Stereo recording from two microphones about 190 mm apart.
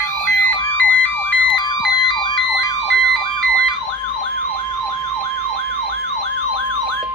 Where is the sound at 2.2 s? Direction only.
20° left (ahead or behind).